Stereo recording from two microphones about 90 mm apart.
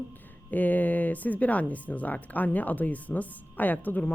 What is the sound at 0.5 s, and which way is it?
Speech, 20° left (ahead or behind).